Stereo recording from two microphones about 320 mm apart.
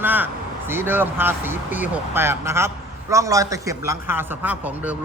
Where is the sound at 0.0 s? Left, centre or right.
Centre.